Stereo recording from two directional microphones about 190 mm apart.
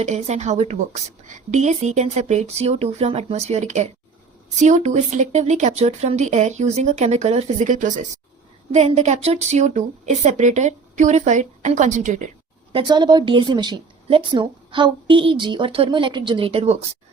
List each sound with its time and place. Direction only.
0.0 s speech: 35° right (ahead or behind)
12.7 s a woman's voice: 20° right (ahead or behind)